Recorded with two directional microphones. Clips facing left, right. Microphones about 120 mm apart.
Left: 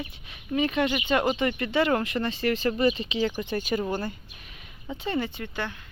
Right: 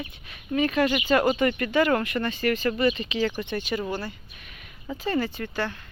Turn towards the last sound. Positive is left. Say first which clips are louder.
# right 3 dB
turn(degrees=15)  # may be behind; listen again after turning